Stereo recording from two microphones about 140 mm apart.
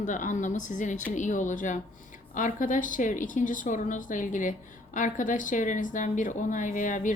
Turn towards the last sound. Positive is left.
turn(degrees=65)  # may be behind; listen again after turning